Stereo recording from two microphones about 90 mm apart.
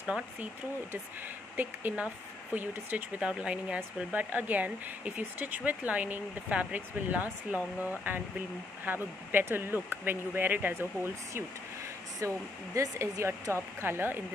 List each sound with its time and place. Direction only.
0.0 s speech: 15° right (ahead or behind)
1.6 s speech: 20° right (ahead or behind)
8.8 s speech: 20° right (ahead or behind)
12.2 s speech: 35° right (ahead or behind)